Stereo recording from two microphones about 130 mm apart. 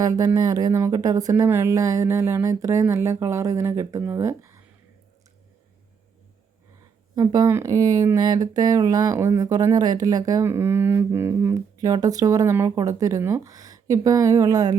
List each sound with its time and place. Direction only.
0.0 s speech: 30° right (ahead or behind)
7.2 s speech: 30° right (ahead or behind)